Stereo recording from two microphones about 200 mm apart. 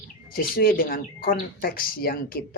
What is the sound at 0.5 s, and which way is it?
Speech, 45° left (ahead or behind).